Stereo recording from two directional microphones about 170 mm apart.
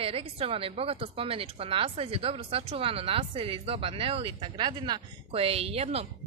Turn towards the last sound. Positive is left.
turn(degrees=-35)  # may be behind; listen again after turning